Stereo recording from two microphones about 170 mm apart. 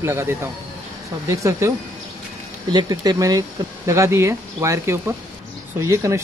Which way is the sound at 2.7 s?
25° right (ahead or behind).